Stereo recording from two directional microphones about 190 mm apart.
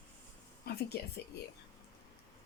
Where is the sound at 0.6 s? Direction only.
55° left (ahead or behind).